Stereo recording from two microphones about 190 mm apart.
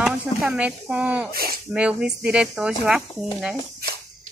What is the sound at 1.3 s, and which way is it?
Speech, 50° right (ahead or behind).